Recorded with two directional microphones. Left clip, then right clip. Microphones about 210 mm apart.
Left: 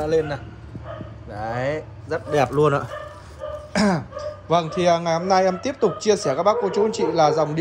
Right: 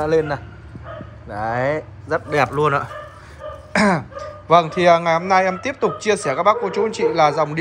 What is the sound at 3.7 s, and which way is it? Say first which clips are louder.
Dog: right 5 dB; 15° left (ahead or behind).